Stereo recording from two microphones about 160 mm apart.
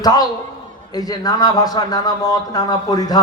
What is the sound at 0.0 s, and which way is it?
A man's voice, 25° left (ahead or behind).